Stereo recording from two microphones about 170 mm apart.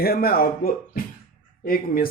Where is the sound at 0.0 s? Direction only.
65° left (ahead or behind).